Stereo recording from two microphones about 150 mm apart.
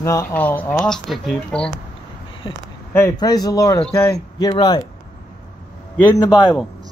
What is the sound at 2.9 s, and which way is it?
Speech, 20° left (ahead or behind).